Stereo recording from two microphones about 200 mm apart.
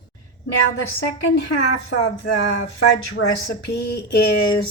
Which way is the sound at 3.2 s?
90° left.